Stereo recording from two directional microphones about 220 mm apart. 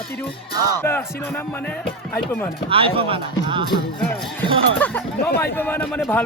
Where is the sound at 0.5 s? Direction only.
15° right (ahead or behind).